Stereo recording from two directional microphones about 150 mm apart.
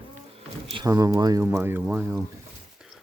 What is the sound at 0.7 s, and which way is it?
Speech, 25° right (ahead or behind).